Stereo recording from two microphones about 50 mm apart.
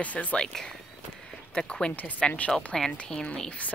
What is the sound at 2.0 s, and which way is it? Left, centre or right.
Speech, left.